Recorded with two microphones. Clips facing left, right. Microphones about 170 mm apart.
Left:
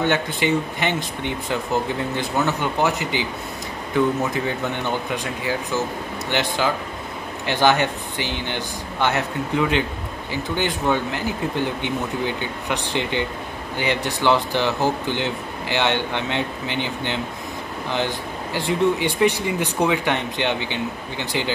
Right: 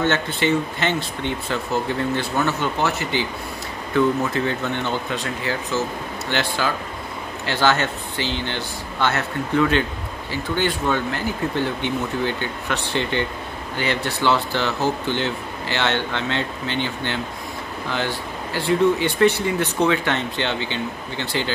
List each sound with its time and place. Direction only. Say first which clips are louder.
0.0 s speech: even; 15° left (ahead or behind)